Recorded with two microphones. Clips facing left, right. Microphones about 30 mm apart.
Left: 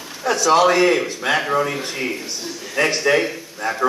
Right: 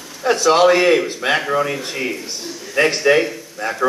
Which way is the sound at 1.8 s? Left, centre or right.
Centre.